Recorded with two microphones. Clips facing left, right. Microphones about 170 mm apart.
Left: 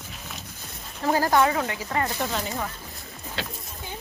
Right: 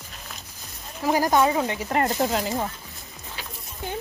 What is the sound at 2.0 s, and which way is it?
Speech, 35° right (ahead or behind).